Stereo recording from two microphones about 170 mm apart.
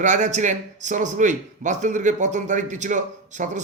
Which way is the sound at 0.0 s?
45° right (ahead or behind).